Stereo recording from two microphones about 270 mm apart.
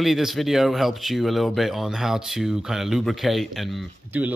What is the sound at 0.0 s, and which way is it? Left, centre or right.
Speech, centre.